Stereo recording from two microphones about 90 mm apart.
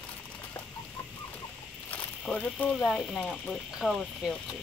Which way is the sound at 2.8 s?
5° left (ahead or behind).